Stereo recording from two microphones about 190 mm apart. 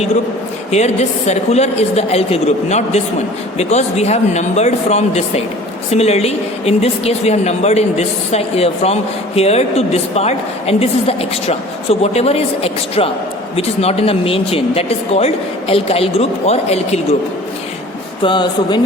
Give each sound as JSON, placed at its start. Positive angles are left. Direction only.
{"t": 0.7, "sound": "speech", "side_deg": 35}
{"t": 18.2, "sound": "speech", "side_deg": 25}